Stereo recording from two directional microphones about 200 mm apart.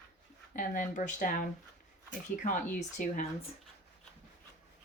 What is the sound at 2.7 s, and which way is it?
Speech, 35° left (ahead or behind).